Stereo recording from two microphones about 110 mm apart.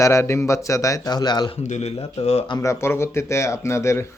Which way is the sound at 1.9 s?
55° left (ahead or behind).